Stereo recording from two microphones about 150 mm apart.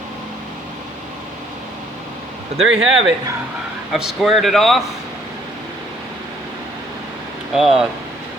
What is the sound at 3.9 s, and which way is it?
Speech, centre (ahead or behind).